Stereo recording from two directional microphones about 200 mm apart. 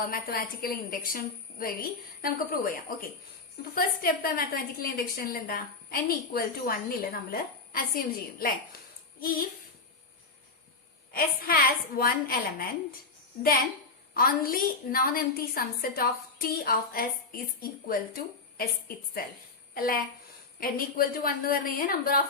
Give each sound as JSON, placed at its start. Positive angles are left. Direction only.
{"t": 0.1, "sound": "a woman's voice", "side_deg": 45}
{"t": 11.1, "sound": "a woman's voice", "side_deg": 45}
{"t": 19.7, "sound": "a woman's voice", "side_deg": 45}